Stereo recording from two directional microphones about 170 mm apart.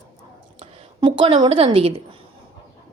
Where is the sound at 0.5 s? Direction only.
30° right (ahead or behind).